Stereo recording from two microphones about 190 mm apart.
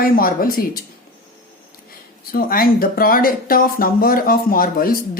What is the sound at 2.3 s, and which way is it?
Speech, 50° left (ahead or behind).